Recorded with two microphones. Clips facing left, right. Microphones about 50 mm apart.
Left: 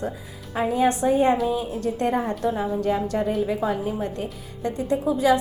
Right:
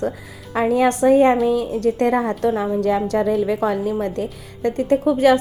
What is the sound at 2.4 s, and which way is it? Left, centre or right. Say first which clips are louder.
Speech: right 5 dB; right.